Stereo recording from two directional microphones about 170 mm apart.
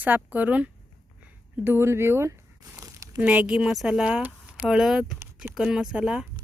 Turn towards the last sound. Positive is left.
turn(degrees=-5)  # may be behind; listen again after turning